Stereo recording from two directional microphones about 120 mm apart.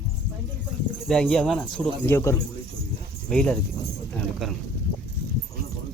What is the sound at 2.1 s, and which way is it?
Speech, 25° left (ahead or behind).